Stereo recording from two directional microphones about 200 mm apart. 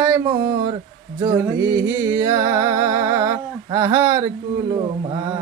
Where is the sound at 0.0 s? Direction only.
20° right (ahead or behind).